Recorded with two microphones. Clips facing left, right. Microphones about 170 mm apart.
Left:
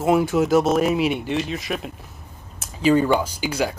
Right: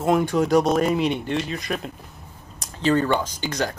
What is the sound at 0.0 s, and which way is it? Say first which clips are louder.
Speech: left 2 dB; 5° left (ahead or behind).